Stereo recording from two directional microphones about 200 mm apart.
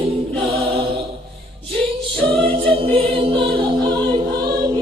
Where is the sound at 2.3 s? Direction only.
25° right (ahead or behind).